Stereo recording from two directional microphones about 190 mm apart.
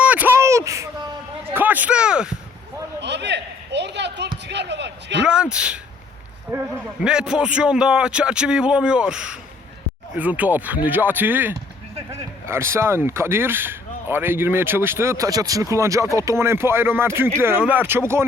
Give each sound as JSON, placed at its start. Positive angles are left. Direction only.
{"t": 0.0, "sound": "a sound", "side_deg": -10}
{"t": 3.0, "sound": "a sound", "side_deg": -65}
{"t": 4.4, "sound": "a man's voice", "side_deg": -65}
{"t": 5.2, "sound": "a man's voice", "side_deg": -5}
{"t": 6.5, "sound": "speech", "side_deg": -20}
{"t": 7.0, "sound": "a man's voice", "side_deg": -5}